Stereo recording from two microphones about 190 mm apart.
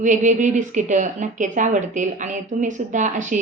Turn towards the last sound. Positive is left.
turn(degrees=-40)  # may be behind; listen again after turning